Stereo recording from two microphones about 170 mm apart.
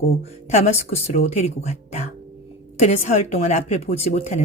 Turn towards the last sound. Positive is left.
turn(degrees=40)  # may be behind; listen again after turning